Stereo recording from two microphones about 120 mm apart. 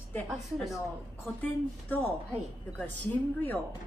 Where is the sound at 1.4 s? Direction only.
15° left (ahead or behind).